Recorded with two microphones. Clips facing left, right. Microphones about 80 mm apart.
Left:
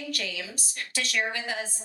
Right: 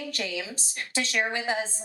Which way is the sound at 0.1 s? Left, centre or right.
Right.